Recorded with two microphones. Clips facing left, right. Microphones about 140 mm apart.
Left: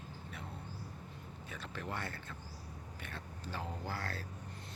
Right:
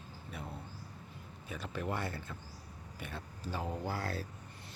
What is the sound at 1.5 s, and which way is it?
Speech, 10° right (ahead or behind).